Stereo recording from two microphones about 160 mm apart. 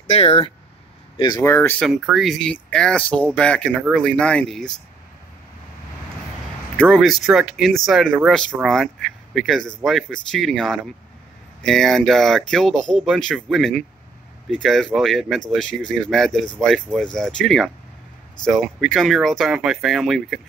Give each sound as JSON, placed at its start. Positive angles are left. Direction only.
{"t": 0.1, "sound": "speech", "side_deg": 40}
{"t": 1.1, "sound": "speech", "side_deg": 25}
{"t": 1.4, "sound": "speech", "side_deg": 15}
{"t": 1.8, "sound": "speech", "side_deg": 0}
{"t": 6.8, "sound": "speech", "side_deg": 0}